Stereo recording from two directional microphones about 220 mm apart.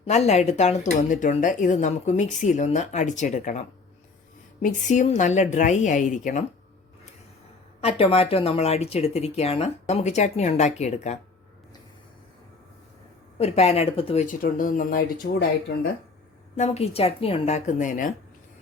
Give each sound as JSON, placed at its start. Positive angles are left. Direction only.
{"t": 0.0, "sound": "speech", "side_deg": 30}
{"t": 7.8, "sound": "speech", "side_deg": 25}
{"t": 13.4, "sound": "speech", "side_deg": 30}
{"t": 16.6, "sound": "speech", "side_deg": 30}